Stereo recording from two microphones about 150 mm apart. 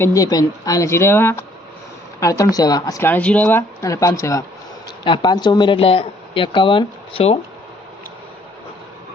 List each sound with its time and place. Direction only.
0.0 s speech: 20° left (ahead or behind)
3.0 s speech: 10° left (ahead or behind); by 7.3 s 40° left (ahead or behind)